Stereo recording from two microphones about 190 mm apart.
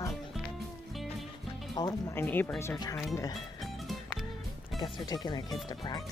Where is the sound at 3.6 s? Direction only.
Centre (ahead or behind).